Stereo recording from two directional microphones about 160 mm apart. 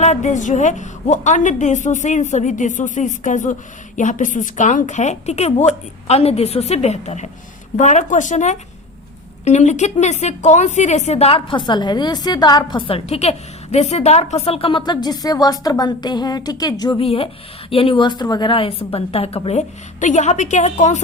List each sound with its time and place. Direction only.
0.0 s a woman's voice: 45° left (ahead or behind); by 17.0 s 25° left (ahead or behind)
17.0 s a woman's voice: 40° left (ahead or behind)